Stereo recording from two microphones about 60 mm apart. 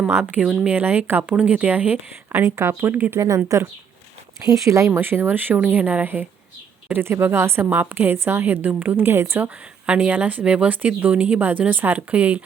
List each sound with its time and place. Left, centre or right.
0.6 s speech: right
2.4 s speech: right
2.9 s speech: right
3.2 s speech: right
4.9 s a woman's voice: right
8.6 s a woman's voice: right
9.4 s speech: right